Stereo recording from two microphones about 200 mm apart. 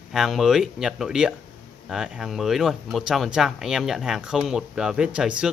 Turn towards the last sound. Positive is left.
turn(degrees=-5)  # may be behind; listen again after turning